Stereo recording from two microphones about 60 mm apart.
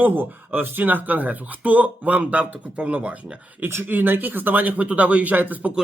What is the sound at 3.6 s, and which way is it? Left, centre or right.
A man's voice, right.